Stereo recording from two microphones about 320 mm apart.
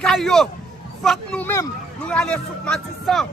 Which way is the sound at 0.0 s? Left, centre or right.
Centre.